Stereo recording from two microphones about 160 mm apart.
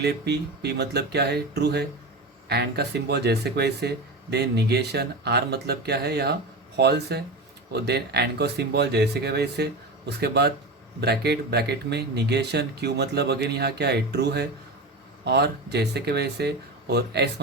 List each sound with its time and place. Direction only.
0.0 s speech: 90° right